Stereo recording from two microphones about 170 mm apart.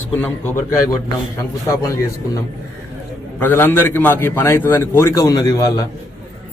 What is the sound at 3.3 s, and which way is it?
A man's voice, 10° left (ahead or behind).